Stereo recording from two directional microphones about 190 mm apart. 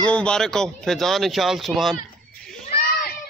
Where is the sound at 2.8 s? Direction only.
50° left (ahead or behind).